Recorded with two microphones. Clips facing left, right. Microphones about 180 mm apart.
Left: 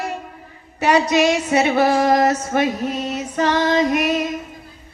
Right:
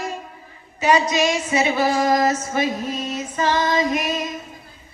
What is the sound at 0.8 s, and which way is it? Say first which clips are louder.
Female singing: left 2 dB; 65° left (ahead or behind).